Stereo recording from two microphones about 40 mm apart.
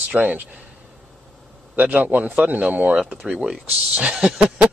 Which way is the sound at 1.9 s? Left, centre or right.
Right.